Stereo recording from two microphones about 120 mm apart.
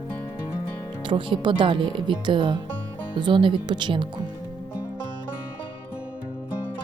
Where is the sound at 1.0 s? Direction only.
45° right (ahead or behind).